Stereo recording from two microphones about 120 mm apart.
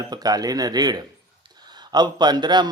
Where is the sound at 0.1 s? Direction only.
35° right (ahead or behind).